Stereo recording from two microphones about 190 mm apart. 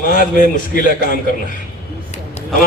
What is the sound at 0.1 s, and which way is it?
Speech, 45° left (ahead or behind).